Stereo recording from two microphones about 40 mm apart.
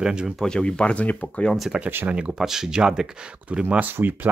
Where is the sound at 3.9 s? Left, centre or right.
Right.